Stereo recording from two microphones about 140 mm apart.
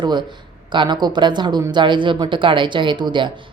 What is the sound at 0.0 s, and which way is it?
Speech, 30° right (ahead or behind).